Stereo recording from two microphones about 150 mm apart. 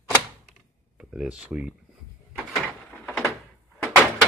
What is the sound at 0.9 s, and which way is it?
Speech, 5° right (ahead or behind).